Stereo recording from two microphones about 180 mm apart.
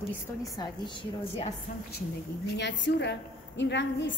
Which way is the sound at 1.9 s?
70° left (ahead or behind).